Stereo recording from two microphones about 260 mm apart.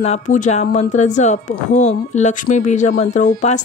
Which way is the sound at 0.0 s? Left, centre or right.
Left.